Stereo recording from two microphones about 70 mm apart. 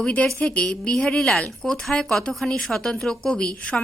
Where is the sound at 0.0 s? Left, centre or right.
Left.